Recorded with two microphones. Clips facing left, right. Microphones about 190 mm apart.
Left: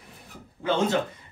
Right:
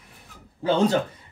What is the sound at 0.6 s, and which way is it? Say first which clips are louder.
Speech: right 3 dB; 35° right (ahead or behind).